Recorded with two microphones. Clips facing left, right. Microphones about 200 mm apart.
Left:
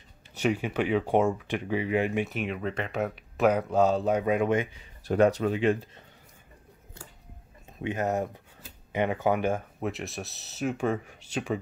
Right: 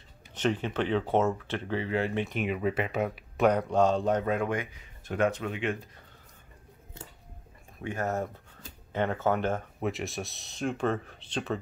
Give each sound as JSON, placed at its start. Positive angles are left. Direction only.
{"t": 0.3, "sound": "speech", "side_deg": 10}
{"t": 5.0, "sound": "speech", "side_deg": 35}
{"t": 7.8, "sound": "speech", "side_deg": 20}
{"t": 9.8, "sound": "speech", "side_deg": 0}